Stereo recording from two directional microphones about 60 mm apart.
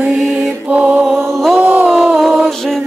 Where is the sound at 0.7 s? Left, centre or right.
Right.